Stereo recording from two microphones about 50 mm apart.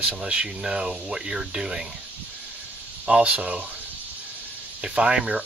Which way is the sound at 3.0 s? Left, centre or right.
Right.